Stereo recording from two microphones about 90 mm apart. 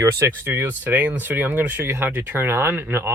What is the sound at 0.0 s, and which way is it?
Speech, 25° right (ahead or behind).